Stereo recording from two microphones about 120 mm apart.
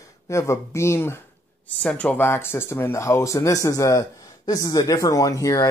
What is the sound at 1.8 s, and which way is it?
Speech, 10° left (ahead or behind).